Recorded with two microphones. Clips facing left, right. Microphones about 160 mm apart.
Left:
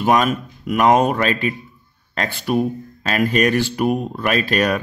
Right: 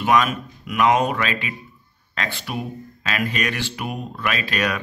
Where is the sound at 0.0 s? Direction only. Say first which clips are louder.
Left 2 dB; 40° left (ahead or behind).